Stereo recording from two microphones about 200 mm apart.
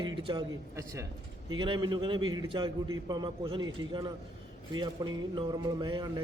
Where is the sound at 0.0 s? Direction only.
25° right (ahead or behind).